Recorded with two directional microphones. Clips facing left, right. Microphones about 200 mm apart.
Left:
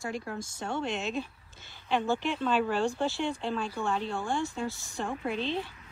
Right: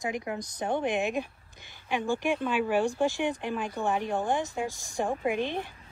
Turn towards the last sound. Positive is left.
turn(degrees=-15)  # may be behind; listen again after turning